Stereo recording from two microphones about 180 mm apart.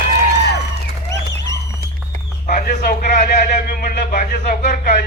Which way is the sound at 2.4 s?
45° left (ahead or behind).